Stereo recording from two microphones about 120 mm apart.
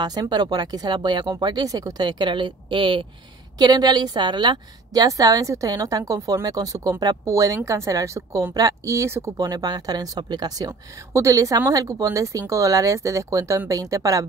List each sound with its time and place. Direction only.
0.0 s a woman's voice: 35° right (ahead or behind)
10.7 s a woman's voice: 25° right (ahead or behind)